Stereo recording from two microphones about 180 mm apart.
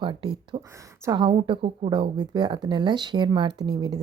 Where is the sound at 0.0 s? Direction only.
25° right (ahead or behind).